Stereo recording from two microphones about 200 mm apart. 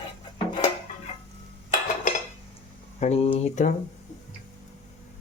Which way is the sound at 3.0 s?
30° left (ahead or behind).